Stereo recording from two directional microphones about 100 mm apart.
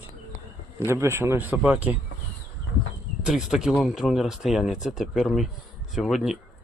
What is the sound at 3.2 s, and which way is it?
Speech, 5° right (ahead or behind).